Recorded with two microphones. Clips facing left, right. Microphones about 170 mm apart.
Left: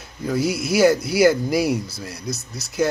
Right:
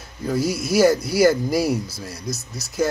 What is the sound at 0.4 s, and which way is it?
Speech, 60° left (ahead or behind).